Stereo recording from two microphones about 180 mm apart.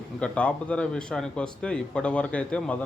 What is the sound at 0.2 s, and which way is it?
A man's voice, 5° left (ahead or behind).